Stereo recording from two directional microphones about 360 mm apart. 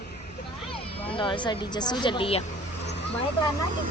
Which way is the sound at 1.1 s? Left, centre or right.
Centre.